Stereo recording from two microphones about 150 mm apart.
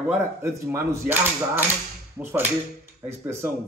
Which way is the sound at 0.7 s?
15° right (ahead or behind).